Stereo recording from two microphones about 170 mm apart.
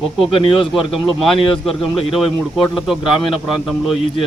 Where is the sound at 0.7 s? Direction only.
Centre (ahead or behind).